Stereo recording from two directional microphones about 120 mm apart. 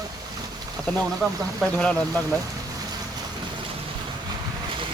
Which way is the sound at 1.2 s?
5° right (ahead or behind).